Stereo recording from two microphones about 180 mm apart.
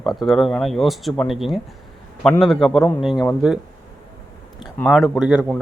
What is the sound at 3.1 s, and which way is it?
Speech, 15° left (ahead or behind).